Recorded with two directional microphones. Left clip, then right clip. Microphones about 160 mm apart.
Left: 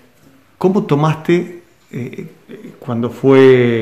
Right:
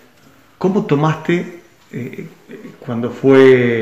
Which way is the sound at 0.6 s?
25° left (ahead or behind).